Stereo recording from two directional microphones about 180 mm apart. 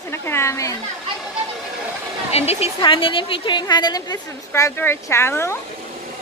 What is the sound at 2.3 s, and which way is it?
A woman's voice, 35° left (ahead or behind).